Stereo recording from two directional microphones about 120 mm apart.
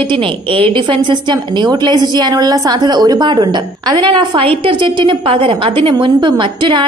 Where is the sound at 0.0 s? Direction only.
45° right (ahead or behind).